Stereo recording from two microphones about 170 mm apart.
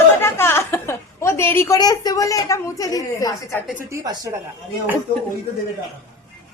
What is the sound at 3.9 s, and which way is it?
Speech, 20° right (ahead or behind).